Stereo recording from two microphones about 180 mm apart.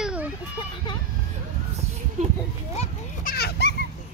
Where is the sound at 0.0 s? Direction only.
5° right (ahead or behind).